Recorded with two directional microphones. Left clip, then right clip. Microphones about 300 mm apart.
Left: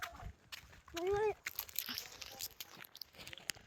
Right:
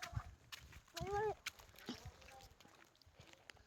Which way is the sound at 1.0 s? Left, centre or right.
Left.